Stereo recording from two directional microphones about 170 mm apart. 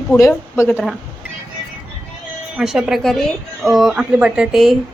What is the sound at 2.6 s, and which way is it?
A woman's voice, 5° right (ahead or behind).